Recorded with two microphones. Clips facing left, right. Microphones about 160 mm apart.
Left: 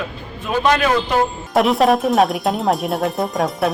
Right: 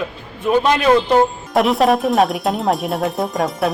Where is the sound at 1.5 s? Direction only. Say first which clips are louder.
Left 1 dB; centre (ahead or behind).